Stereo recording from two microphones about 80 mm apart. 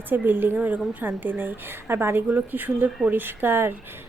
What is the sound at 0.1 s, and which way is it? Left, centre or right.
A woman's voice, right.